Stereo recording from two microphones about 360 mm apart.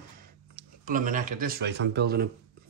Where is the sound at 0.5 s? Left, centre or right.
Right.